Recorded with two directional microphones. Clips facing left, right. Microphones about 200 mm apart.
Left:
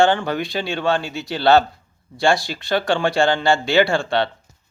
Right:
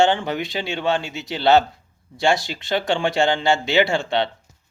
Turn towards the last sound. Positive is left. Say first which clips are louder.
# left 2 dB
turn(degrees=-20)  # may be behind; listen again after turning